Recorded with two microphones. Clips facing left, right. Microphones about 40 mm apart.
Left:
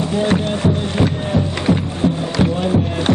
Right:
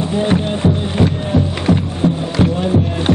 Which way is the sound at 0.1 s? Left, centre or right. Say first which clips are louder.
Right 1 dB; centre.